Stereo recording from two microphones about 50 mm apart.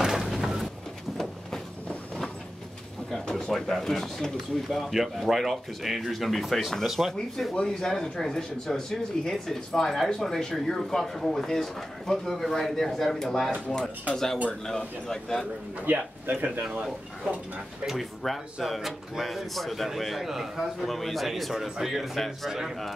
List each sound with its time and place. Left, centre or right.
0.0 s a sound: centre
3.3 s speech: centre
15.8 s speech: right
17.8 s speech: centre